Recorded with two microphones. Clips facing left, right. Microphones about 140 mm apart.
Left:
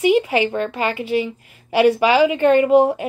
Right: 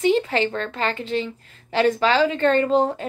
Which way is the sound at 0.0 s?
10° left (ahead or behind).